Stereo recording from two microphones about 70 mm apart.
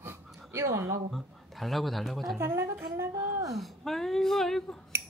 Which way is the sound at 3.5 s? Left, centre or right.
Centre.